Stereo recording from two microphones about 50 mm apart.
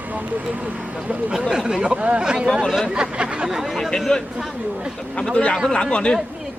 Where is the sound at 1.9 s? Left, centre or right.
Right.